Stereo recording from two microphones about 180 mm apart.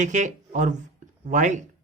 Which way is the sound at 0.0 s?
45° right (ahead or behind).